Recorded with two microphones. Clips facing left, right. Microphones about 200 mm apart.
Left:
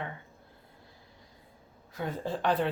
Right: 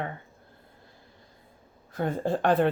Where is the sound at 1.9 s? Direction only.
50° right (ahead or behind).